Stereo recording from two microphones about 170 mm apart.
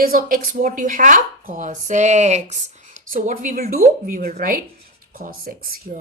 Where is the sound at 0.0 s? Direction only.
55° right (ahead or behind).